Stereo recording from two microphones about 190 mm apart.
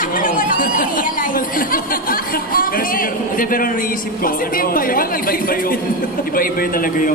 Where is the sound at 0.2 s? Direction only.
45° left (ahead or behind).